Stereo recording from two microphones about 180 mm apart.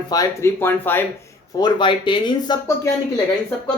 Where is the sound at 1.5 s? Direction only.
25° left (ahead or behind).